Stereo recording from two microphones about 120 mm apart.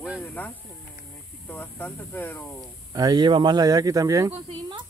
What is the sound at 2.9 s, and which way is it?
Speech, 30° right (ahead or behind).